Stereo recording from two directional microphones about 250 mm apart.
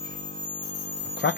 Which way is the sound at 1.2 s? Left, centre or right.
Left.